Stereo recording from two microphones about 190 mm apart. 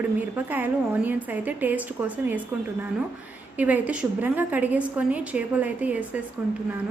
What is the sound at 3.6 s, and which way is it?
A woman's voice, 10° right (ahead or behind).